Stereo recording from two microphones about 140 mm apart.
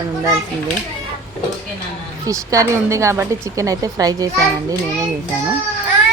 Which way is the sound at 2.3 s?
20° right (ahead or behind).